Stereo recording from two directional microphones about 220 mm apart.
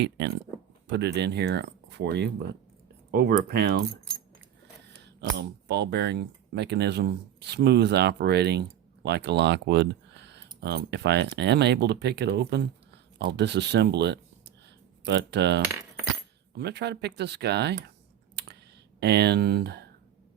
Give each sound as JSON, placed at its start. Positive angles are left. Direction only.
{"t": 0.0, "sound": "speech", "side_deg": -50}
{"t": 5.0, "sound": "speech", "side_deg": -50}
{"t": 18.9, "sound": "speech", "side_deg": -50}